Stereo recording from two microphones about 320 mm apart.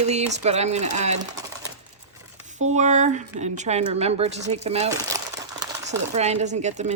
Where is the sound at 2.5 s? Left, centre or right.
Right.